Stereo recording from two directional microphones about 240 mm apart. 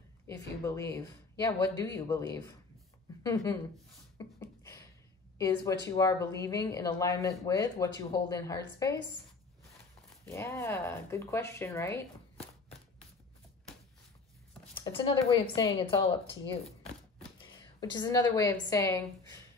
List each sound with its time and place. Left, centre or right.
0.3 s speech: centre
4.2 s a sound: centre
5.4 s speech: centre
10.2 s speech: centre
14.7 s a woman's voice: left
17.4 s a woman's voice: centre